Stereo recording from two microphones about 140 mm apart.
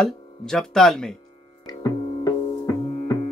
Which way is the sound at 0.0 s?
Centre (ahead or behind).